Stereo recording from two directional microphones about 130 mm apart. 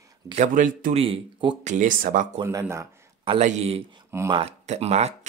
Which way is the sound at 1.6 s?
75° right (ahead or behind).